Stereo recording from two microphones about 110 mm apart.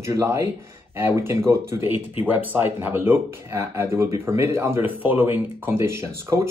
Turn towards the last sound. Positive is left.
turn(degrees=-25)  # may be behind; listen again after turning